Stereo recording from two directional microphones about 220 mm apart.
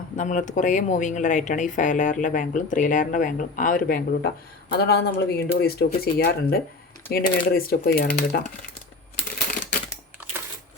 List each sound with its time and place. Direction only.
0.2 s speech: 35° left (ahead or behind)